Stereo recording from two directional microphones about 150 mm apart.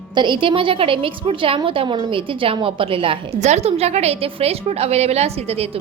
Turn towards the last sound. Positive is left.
turn(degrees=-40)  # may be behind; listen again after turning